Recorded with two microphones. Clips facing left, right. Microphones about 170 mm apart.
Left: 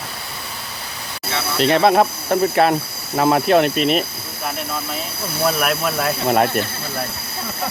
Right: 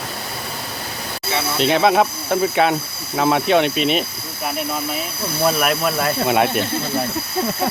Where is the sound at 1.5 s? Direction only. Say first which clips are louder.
Left 2 dB; centre (ahead or behind).